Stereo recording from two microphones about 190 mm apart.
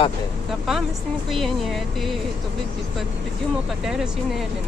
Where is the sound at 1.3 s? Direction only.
Centre (ahead or behind).